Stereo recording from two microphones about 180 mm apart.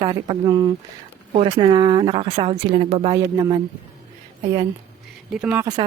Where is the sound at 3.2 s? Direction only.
20° right (ahead or behind).